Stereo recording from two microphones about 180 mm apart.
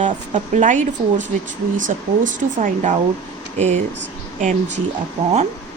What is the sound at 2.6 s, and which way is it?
Speech, 45° right (ahead or behind).